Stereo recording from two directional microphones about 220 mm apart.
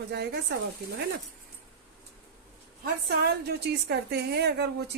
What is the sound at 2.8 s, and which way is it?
A woman's voice, 45° right (ahead or behind).